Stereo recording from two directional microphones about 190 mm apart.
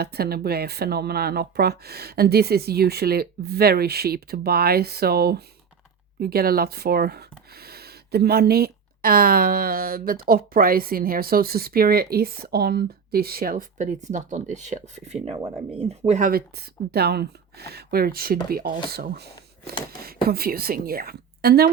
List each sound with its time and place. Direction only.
0.0 s speech: 55° right (ahead or behind)